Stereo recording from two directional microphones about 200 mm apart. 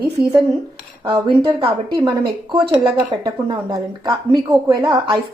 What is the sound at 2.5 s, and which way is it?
Speech, 25° right (ahead or behind).